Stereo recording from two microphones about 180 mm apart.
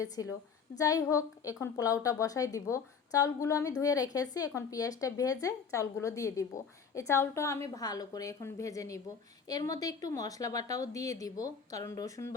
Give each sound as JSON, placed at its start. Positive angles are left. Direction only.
{"t": 0.8, "sound": "a woman's voice", "side_deg": 20}